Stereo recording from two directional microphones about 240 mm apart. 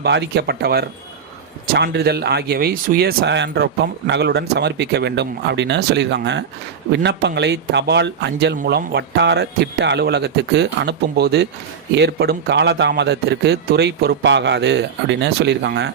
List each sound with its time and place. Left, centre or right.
0.0 s speech: right